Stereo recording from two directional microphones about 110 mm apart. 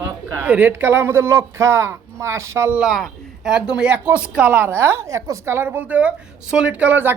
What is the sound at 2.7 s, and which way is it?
Speech, centre (ahead or behind).